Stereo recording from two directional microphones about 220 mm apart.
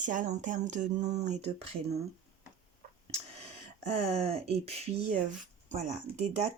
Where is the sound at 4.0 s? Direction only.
25° right (ahead or behind).